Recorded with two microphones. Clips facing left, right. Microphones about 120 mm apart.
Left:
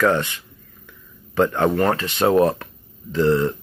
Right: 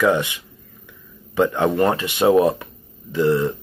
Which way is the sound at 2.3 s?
5° right (ahead or behind).